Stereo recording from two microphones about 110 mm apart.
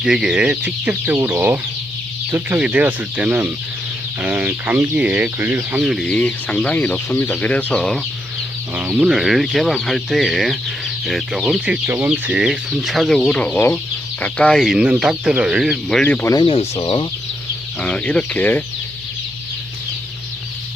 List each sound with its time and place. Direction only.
0.0 s speech: 5° right (ahead or behind)
6.1 s speech: 10° left (ahead or behind)
8.7 s speech: 10° right (ahead or behind)
16.4 s speech: 60° left (ahead or behind)
17.7 s speech: 10° left (ahead or behind)